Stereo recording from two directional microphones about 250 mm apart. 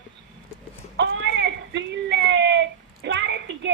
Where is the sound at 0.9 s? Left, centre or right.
Right.